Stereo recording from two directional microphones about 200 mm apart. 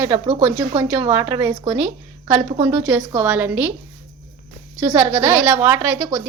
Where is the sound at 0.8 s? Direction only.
10° right (ahead or behind).